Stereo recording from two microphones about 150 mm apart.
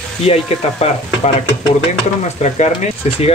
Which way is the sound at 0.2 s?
45° left (ahead or behind).